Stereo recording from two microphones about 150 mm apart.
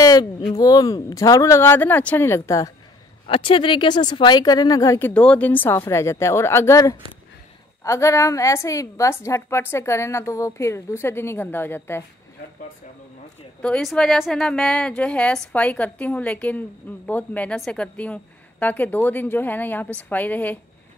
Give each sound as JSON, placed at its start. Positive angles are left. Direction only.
{"t": 0.0, "sound": "a sound", "side_deg": 25}
{"t": 0.5, "sound": "a woman's voice", "side_deg": 25}
{"t": 3.3, "sound": "a woman's voice", "side_deg": 35}
{"t": 13.6, "sound": "a woman's voice", "side_deg": 5}